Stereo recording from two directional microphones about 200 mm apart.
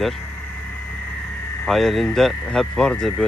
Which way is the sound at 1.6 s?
Centre (ahead or behind).